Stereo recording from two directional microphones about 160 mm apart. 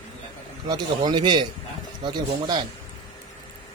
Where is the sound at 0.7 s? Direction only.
30° right (ahead or behind).